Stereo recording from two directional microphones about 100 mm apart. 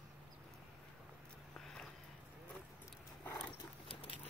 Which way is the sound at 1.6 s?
5° left (ahead or behind).